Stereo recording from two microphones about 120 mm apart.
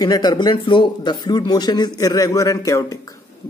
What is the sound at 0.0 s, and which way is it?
Speech, 35° left (ahead or behind).